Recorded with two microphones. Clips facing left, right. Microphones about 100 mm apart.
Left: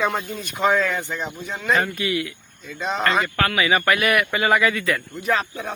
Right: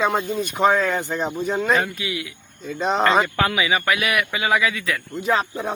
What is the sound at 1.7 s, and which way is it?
Speech, 5° right (ahead or behind).